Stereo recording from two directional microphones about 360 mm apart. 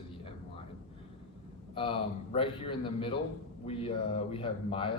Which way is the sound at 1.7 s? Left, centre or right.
Centre.